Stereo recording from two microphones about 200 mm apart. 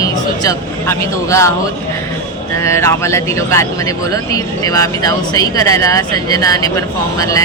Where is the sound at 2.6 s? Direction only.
15° left (ahead or behind).